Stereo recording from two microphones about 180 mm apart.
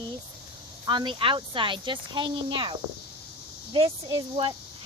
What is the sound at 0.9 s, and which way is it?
A child's voice, 25° right (ahead or behind).